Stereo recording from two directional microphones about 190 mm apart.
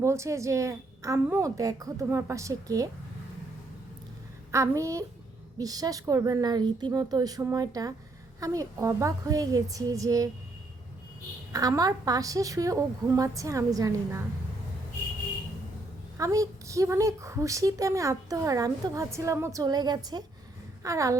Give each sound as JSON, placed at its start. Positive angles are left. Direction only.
{"t": 0.0, "sound": "a woman's voice", "side_deg": -15}
{"t": 4.5, "sound": "a woman's voice", "side_deg": -15}
{"t": 11.5, "sound": "a woman's voice", "side_deg": -20}
{"t": 16.1, "sound": "a woman's voice", "side_deg": -15}